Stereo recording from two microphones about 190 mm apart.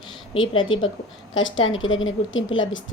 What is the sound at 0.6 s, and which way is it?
A woman's voice, 90° left.